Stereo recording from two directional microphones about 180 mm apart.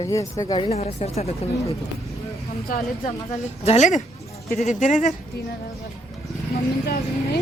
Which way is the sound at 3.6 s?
40° left (ahead or behind).